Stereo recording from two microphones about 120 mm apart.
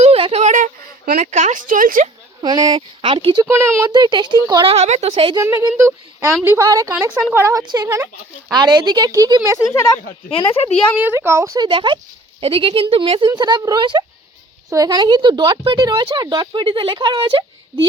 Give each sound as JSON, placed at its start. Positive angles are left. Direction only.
{"t": 0.0, "sound": "a sound", "side_deg": -55}
{"t": 1.2, "sound": "speech", "side_deg": -90}
{"t": 2.4, "sound": "speech", "side_deg": -35}
{"t": 3.5, "sound": "a woman's voice", "side_deg": -20}
{"t": 3.8, "sound": "speech", "side_deg": -35}
{"t": 4.6, "sound": "a woman's voice", "side_deg": -60}
{"t": 5.4, "sound": "a woman's voice", "side_deg": -25}
{"t": 7.6, "sound": "a woman's voice", "side_deg": -35}
{"t": 8.5, "sound": "speech", "side_deg": -35}
{"t": 10.4, "sound": "speech", "side_deg": 55}
{"t": 10.9, "sound": "a woman's voice", "side_deg": -15}
{"t": 11.7, "sound": "speech", "side_deg": -40}